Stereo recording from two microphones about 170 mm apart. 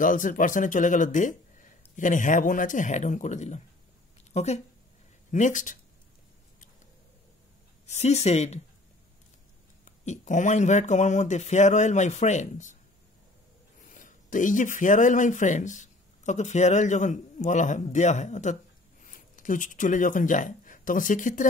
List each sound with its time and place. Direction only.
0.0 s speech: 50° left (ahead or behind)
7.8 s speech: 40° left (ahead or behind)
10.0 s speech: 45° left (ahead or behind)
13.7 s speech: 50° left (ahead or behind)